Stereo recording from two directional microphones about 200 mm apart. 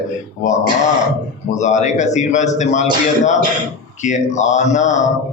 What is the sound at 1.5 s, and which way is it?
Speech, 35° left (ahead or behind).